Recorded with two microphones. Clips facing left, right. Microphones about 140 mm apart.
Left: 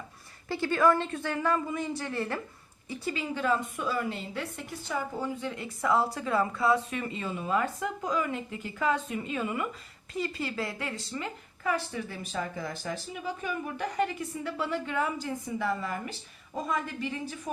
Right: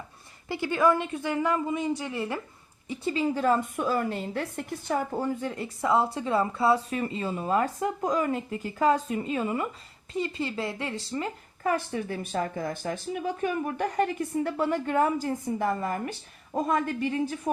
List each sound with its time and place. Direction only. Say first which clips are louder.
0.4 s a woman's voice: right 1 dB; 15° right (ahead or behind)
2.9 s a woman's voice: right 6 dB; 25° right (ahead or behind); by 17.5 s 50° right (ahead or behind)